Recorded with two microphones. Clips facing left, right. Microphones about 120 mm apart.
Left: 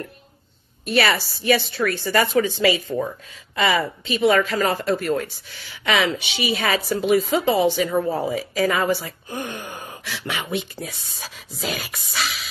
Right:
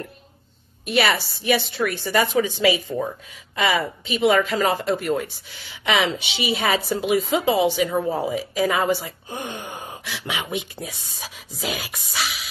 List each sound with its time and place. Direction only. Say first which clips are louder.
0.8 s a woman's voice: left 1 dB; 15° right (ahead or behind)
5.9 s a woman's voice: even; 25° right (ahead or behind); by 8.7 s 10° right (ahead or behind)
8.7 s a woman's voice: even; 20° right (ahead or behind)